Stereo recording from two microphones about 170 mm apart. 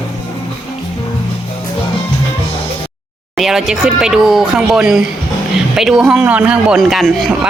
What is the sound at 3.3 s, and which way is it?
Speech, centre (ahead or behind).